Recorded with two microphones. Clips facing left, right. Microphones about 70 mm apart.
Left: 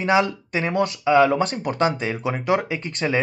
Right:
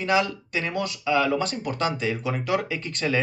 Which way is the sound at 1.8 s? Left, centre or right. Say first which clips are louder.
Left 4 dB; left.